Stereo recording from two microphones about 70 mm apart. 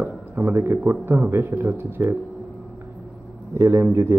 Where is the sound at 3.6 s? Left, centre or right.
Right.